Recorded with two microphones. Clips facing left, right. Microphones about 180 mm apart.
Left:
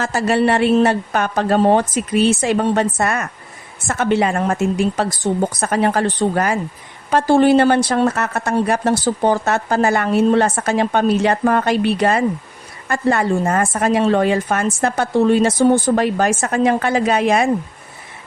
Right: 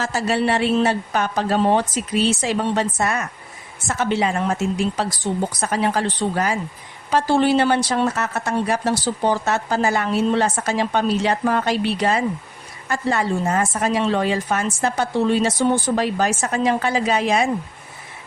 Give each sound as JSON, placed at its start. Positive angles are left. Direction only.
{"t": 0.0, "sound": "a woman's voice", "side_deg": 55}